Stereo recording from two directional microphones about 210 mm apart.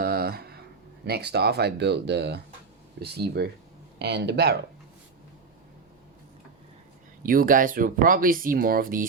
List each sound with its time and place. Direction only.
0.0 s a sound: 45° right (ahead or behind)
1.0 s speech: 50° right (ahead or behind)
7.2 s speech: 40° right (ahead or behind)